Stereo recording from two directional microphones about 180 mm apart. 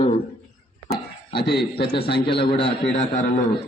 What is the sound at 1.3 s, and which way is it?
Speech, 65° left (ahead or behind).